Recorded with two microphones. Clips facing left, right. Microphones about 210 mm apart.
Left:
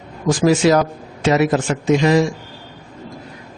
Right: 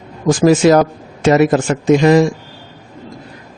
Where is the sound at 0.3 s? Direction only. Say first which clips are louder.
Right 4 dB; 50° right (ahead or behind).